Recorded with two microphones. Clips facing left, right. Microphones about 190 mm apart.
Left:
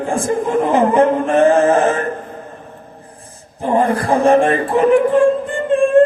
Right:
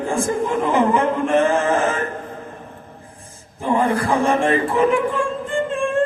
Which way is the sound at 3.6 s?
35° left (ahead or behind).